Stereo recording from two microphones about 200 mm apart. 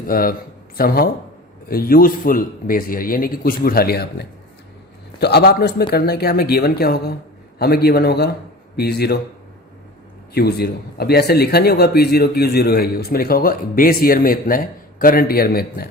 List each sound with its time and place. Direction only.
0.1 s speech: 45° left (ahead or behind)
10.3 s speech: 55° left (ahead or behind)